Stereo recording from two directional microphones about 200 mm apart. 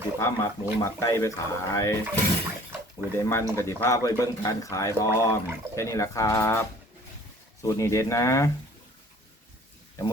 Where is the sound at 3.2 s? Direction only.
15° left (ahead or behind).